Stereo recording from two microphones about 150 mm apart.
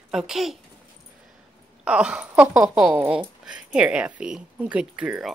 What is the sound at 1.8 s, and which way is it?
Speech, 5° right (ahead or behind).